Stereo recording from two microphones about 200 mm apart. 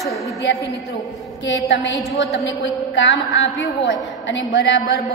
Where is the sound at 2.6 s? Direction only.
65° left (ahead or behind).